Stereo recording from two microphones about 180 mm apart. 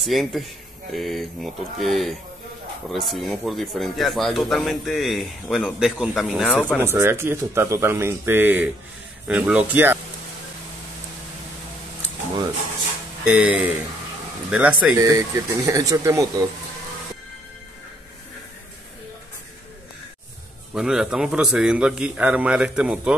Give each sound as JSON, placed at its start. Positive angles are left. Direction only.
{"t": 0.0, "sound": "speech", "side_deg": 0}
{"t": 6.8, "sound": "speech", "side_deg": -15}
{"t": 13.2, "sound": "speech", "side_deg": -5}
{"t": 20.7, "sound": "speech", "side_deg": -5}